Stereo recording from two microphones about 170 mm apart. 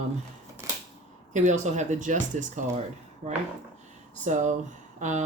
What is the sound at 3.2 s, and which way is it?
Speech, 40° right (ahead or behind).